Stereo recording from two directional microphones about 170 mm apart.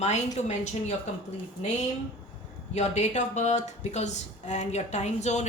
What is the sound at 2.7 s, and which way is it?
Speech, 45° left (ahead or behind).